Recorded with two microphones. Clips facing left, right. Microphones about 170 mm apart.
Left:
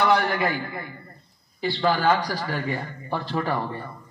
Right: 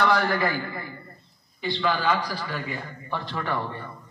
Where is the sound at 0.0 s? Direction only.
20° left (ahead or behind).